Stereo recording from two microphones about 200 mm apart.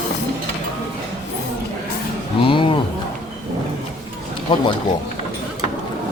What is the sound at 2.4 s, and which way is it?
Speech, 25° left (ahead or behind).